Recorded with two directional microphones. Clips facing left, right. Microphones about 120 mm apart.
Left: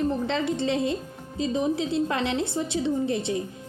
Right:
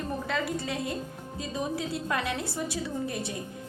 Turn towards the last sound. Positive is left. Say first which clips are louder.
# left 7 dB
turn(degrees=25)  # may be behind; listen again after turning